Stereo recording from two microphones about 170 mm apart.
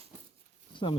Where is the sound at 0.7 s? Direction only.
30° left (ahead or behind).